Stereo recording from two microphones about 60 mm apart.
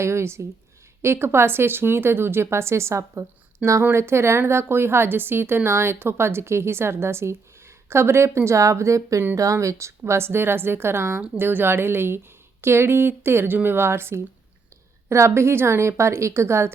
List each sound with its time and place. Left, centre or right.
0.0 s a woman's voice: right